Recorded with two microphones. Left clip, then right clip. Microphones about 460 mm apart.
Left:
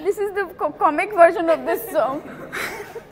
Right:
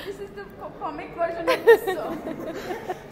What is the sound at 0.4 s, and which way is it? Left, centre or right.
A woman's voice, left.